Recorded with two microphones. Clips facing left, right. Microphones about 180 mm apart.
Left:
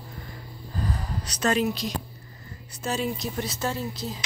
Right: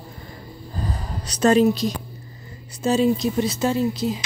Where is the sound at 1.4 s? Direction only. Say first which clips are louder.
Right 8 dB; 35° right (ahead or behind).